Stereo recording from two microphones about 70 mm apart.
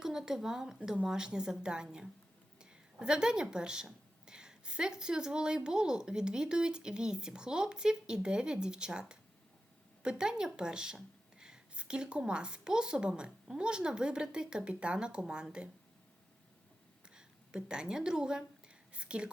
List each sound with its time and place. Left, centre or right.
0.0 s speech: centre
17.2 s speech: centre